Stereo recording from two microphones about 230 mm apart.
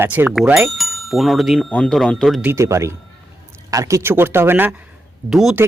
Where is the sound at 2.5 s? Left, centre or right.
Centre.